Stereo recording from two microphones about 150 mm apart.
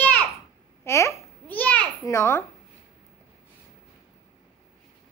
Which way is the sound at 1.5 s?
10° left (ahead or behind).